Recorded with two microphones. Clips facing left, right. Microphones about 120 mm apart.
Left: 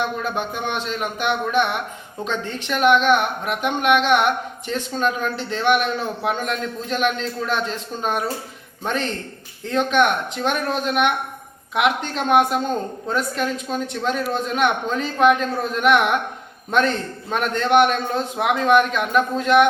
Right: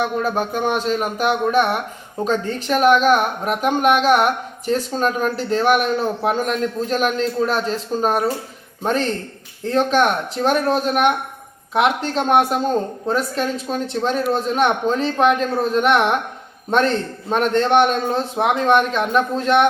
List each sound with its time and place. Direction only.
0.3 s a woman's voice: 40° right (ahead or behind)